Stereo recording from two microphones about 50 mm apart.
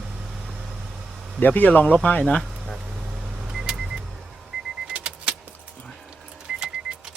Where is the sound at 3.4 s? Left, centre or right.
Centre.